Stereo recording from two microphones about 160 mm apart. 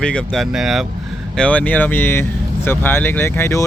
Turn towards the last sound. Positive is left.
turn(degrees=15)  # may be behind; listen again after turning